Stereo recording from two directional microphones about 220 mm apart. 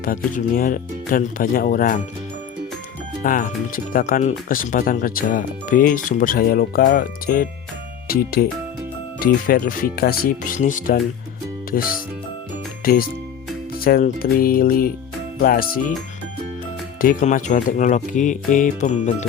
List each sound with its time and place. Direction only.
0.3 s speech: 40° left (ahead or behind)
3.2 s speech: 40° left (ahead or behind)
12.8 s speech: 40° left (ahead or behind)
17.0 s speech: 35° left (ahead or behind)